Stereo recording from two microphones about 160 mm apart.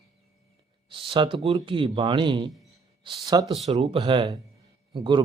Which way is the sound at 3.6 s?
40° right (ahead or behind).